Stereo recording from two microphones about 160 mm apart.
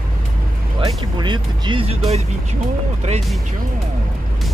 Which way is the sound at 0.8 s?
30° right (ahead or behind).